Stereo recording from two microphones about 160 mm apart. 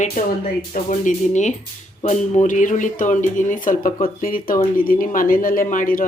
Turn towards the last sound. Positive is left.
turn(degrees=55)  # may be behind; listen again after turning